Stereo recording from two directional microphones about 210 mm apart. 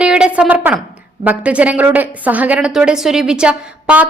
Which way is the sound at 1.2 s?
5° right (ahead or behind).